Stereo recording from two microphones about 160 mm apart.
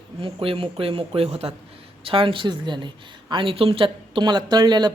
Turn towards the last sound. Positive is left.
turn(degrees=-25)  # may be behind; listen again after turning